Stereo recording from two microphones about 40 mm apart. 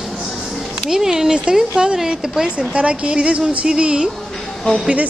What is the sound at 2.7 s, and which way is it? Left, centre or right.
A woman's voice, right.